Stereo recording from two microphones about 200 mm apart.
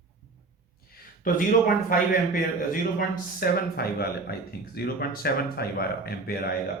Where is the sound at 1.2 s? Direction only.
45° left (ahead or behind).